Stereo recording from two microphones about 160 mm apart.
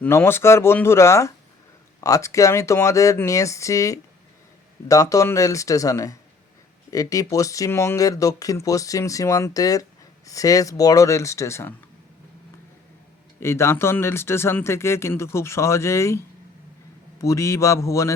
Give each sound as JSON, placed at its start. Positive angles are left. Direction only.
{"t": 0.0, "sound": "speech", "side_deg": 15}
{"t": 13.4, "sound": "speech", "side_deg": 15}